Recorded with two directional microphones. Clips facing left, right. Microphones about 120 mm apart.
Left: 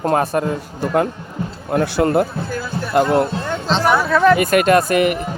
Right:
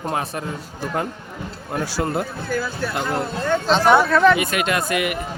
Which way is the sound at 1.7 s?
60° left (ahead or behind).